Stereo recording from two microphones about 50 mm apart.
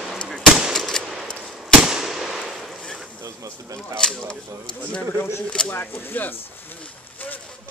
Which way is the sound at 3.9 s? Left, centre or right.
Centre.